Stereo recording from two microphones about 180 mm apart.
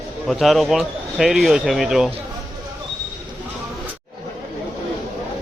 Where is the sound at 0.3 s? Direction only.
Centre (ahead or behind).